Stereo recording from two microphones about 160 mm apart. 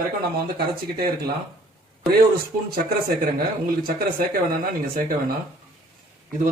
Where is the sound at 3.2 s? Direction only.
65° right (ahead or behind).